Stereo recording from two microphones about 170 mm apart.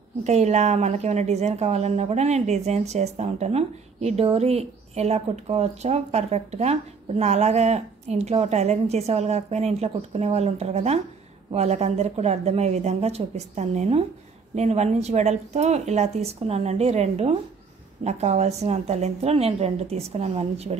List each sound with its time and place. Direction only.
0.2 s speech: 40° right (ahead or behind)